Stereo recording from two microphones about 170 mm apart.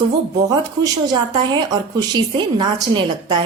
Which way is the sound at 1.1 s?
25° right (ahead or behind).